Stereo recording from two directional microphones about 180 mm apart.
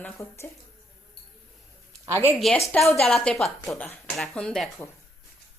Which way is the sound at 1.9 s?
15° right (ahead or behind).